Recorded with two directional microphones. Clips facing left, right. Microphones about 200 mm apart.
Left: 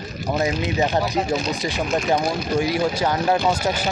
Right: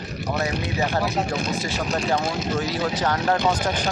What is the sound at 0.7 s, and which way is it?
Speech, 20° left (ahead or behind).